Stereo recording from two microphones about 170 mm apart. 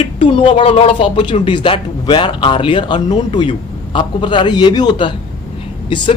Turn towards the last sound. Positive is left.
turn(degrees=30)  # may be behind; listen again after turning